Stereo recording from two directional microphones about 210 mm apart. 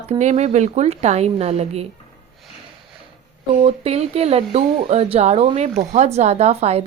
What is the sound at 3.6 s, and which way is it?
A woman's voice, 30° right (ahead or behind).